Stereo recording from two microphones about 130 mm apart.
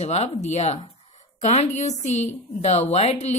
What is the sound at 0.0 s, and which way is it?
Speech, 60° left (ahead or behind).